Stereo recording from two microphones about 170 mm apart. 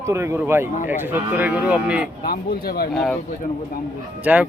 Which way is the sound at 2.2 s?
60° left (ahead or behind).